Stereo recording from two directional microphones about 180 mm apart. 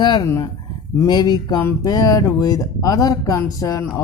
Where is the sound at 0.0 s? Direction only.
25° left (ahead or behind).